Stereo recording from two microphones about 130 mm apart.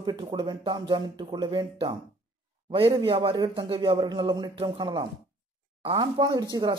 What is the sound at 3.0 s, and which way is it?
Speech, 40° right (ahead or behind).